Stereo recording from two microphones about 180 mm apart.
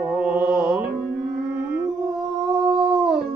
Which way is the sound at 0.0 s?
Centre (ahead or behind).